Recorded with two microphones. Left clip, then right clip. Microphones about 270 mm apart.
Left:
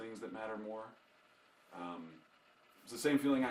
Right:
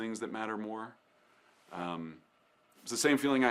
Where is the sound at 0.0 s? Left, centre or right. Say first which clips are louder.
Right 7 dB; right.